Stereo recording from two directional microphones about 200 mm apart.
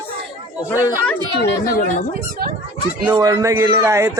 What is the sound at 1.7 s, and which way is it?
Speech, 40° left (ahead or behind).